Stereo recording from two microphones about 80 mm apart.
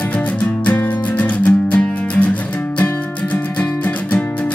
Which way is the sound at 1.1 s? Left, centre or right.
Centre.